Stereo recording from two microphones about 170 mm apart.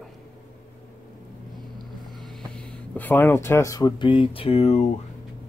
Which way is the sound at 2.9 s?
10° left (ahead or behind).